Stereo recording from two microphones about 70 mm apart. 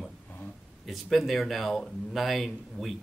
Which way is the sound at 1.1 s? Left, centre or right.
Centre.